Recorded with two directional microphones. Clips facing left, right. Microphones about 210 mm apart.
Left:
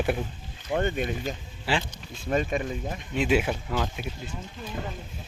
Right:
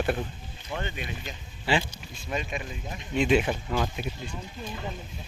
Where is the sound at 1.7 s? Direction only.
5° left (ahead or behind).